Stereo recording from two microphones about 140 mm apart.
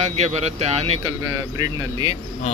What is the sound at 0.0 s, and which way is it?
Speech, 50° right (ahead or behind).